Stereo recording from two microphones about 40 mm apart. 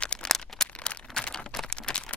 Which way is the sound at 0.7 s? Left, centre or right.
Left.